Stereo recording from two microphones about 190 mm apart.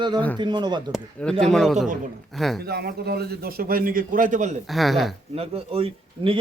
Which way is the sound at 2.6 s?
55° right (ahead or behind).